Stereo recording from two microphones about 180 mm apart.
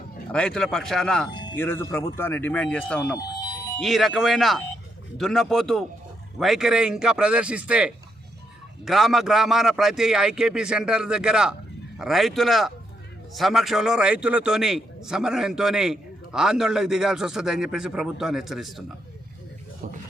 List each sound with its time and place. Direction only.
0.3 s a man's voice: 5° left (ahead or behind)
19.8 s speech: 50° right (ahead or behind)